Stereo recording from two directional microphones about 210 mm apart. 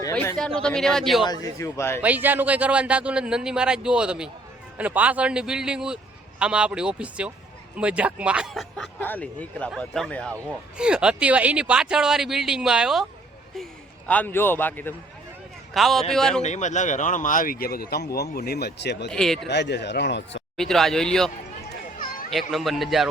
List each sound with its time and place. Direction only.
0.0 s speech: 10° left (ahead or behind)
1.2 s a man's voice: 20° left (ahead or behind)
2.0 s speech: 10° right (ahead or behind)
14.1 s a man's voice: 10° left (ahead or behind)
16.4 s speech: 35° left (ahead or behind); by 19.1 s 55° left (ahead or behind)
19.1 s speech: centre (ahead or behind)
19.5 s speech: 55° left (ahead or behind)
20.6 s speech: centre (ahead or behind)
22.3 s speech: centre (ahead or behind)